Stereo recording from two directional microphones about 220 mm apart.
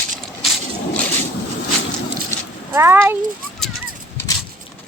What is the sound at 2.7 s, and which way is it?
Speech, 10° right (ahead or behind).